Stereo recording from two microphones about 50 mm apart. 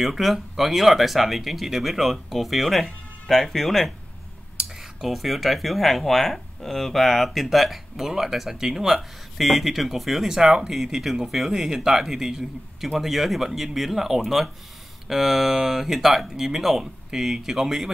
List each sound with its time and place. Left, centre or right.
0.0 s speech: centre
5.0 s speech: centre